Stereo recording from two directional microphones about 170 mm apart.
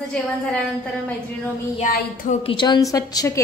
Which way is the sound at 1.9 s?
50° left (ahead or behind).